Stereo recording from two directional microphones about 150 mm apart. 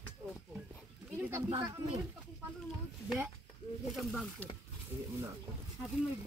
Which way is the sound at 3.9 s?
Centre (ahead or behind).